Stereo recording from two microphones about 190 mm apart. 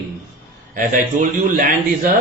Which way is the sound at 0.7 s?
45° right (ahead or behind).